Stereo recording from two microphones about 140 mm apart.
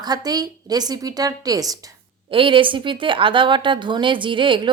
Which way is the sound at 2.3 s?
40° right (ahead or behind).